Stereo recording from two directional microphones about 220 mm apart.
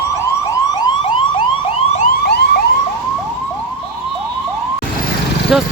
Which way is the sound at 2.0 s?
45° left (ahead or behind).